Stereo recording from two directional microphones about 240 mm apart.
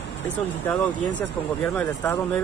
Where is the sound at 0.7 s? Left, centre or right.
Centre.